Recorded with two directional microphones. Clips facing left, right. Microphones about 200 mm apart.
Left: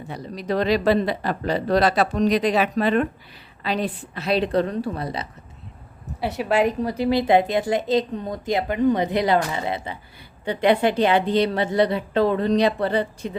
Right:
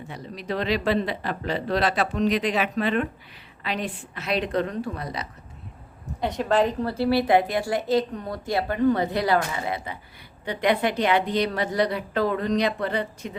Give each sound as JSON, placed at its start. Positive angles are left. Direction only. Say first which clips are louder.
{"t": 0.1, "sound": "speech", "louder": "left 5 dB", "side_deg": 40}
{"t": 6.1, "sound": "a woman's voice", "louder": "left 1 dB", "side_deg": 5}